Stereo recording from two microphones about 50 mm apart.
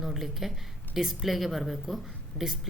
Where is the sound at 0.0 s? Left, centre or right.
Centre.